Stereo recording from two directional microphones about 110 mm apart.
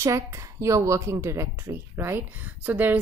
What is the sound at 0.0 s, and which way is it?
A woman's voice, 25° right (ahead or behind).